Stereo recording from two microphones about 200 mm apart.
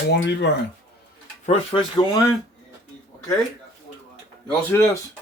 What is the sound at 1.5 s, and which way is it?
Speech, 30° left (ahead or behind).